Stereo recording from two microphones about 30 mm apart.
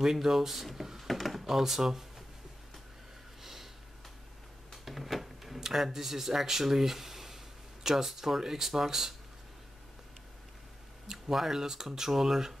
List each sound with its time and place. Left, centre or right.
0.0 s speech: centre
0.9 s a sound: centre
1.5 s speech: centre
4.8 s a sound: centre
5.6 s speech: centre
11.3 s speech: centre